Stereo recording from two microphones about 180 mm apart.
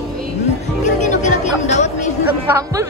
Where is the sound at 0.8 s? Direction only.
40° left (ahead or behind).